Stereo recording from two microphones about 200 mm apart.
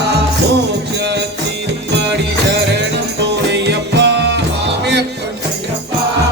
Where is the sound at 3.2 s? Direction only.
60° right (ahead or behind).